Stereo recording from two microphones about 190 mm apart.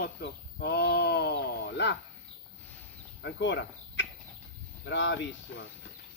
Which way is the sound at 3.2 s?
70° left (ahead or behind).